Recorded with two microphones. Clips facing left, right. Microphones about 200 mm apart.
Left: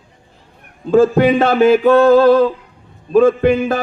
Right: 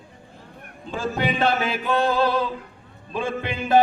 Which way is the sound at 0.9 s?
45° left (ahead or behind).